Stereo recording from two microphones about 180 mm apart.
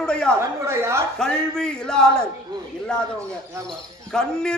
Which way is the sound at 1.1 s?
5° left (ahead or behind).